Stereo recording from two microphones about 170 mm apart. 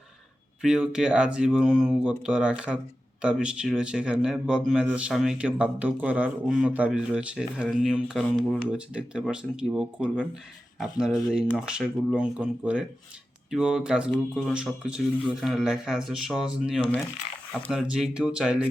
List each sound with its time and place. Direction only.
0.6 s speech: 5° right (ahead or behind)